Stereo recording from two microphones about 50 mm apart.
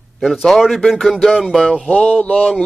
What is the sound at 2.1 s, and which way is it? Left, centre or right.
Speech, left.